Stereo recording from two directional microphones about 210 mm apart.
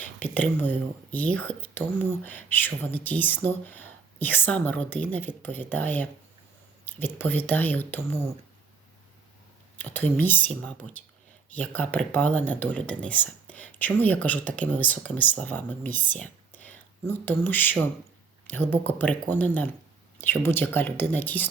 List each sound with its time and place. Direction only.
0.0 s speech: 5° left (ahead or behind)
9.7 s speech: 10° left (ahead or behind)